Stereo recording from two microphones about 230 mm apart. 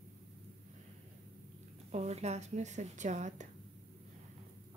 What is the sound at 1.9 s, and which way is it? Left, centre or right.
Speech, right.